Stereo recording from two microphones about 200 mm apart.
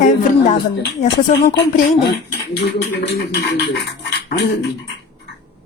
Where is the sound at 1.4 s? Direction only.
55° left (ahead or behind).